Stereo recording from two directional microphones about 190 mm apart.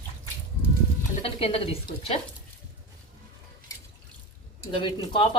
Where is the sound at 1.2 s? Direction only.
30° left (ahead or behind).